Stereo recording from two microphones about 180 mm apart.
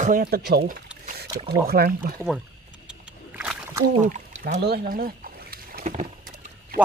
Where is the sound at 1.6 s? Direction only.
55° right (ahead or behind).